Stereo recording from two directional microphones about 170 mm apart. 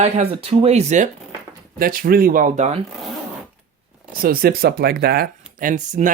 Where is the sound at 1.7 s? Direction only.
60° right (ahead or behind); by 2.8 s 40° right (ahead or behind).